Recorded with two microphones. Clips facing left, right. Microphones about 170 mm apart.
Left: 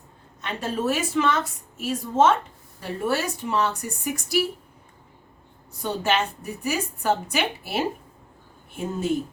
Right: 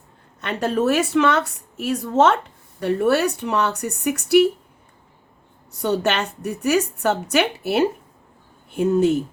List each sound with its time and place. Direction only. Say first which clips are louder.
0.4 s a woman's voice: right 6 dB; 70° right (ahead or behind)
5.8 s a woman's voice: right 4 dB; 70° right (ahead or behind)